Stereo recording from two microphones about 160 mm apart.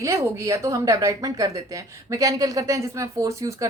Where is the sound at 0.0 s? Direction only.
20° right (ahead or behind).